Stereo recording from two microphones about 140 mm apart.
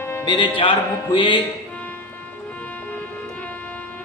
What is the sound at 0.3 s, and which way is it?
Music, 35° left (ahead or behind).